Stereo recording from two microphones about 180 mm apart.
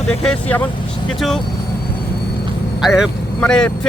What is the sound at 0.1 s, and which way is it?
Speech, 5° left (ahead or behind).